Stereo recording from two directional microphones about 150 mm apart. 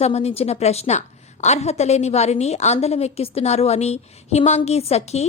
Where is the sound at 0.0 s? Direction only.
45° left (ahead or behind).